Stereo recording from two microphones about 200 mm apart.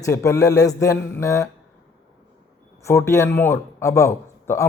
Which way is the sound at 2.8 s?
15° left (ahead or behind).